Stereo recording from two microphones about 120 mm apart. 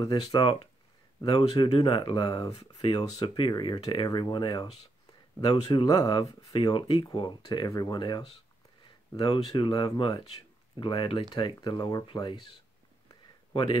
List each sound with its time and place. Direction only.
0.4 s speech: 45° left (ahead or behind)
5.7 s speech: 30° left (ahead or behind)
6.5 s speech: 45° left (ahead or behind)
13.1 s a sound: 45° left (ahead or behind)